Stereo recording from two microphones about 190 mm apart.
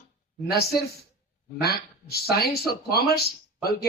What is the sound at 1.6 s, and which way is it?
Speech, 55° left (ahead or behind).